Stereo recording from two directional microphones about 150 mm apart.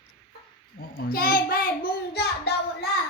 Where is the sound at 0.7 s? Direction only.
90° left; by 1.7 s 70° left (ahead or behind).